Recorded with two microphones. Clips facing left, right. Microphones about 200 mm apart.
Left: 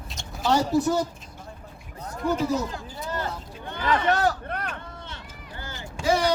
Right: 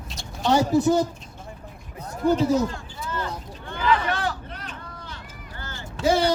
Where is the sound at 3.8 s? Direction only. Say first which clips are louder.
Left 1 dB; 45° left (ahead or behind); by 4.8 s 60° left (ahead or behind).